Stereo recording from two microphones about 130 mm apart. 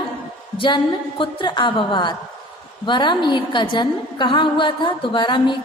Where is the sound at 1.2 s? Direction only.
40° left (ahead or behind).